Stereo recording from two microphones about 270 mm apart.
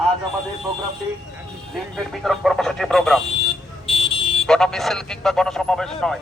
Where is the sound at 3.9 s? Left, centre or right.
Centre.